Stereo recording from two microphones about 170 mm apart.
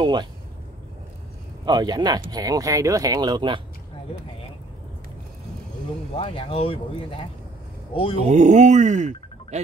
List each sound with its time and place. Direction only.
0.0 s speech: 25° right (ahead or behind)
1.7 s speech: 25° right (ahead or behind)
6.1 s speech: 30° left (ahead or behind)
8.2 s speech: 45° right (ahead or behind)